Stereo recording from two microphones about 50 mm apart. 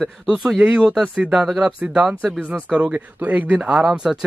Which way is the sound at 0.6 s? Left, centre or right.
Right.